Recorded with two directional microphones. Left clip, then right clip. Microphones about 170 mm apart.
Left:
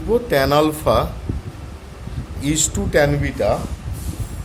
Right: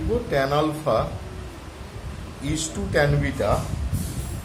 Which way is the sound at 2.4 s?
55° left (ahead or behind).